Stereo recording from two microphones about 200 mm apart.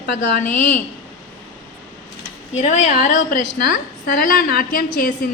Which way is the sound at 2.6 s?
35° left (ahead or behind).